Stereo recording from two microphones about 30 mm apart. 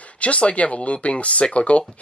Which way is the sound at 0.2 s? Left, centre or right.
Left.